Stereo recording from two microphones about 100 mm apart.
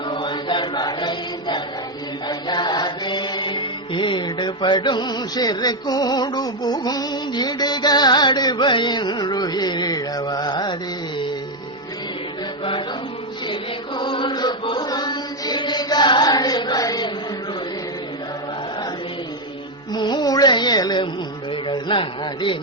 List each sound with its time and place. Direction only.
0.1 s chant: 55° left (ahead or behind)
2.2 s mantra: 50° left (ahead or behind)
13.5 s chant: 55° left (ahead or behind)
19.9 s music: 50° left (ahead or behind)
21.5 s a man's voice: 55° left (ahead or behind)